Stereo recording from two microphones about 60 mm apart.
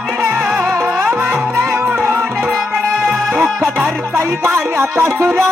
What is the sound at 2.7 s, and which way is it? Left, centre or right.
Music, centre.